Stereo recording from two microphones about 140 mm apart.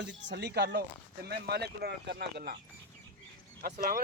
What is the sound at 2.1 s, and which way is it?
Speech, 90° right.